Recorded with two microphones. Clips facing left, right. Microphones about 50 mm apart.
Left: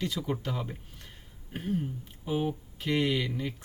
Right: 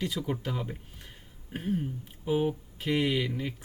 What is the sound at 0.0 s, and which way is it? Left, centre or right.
Speech, centre.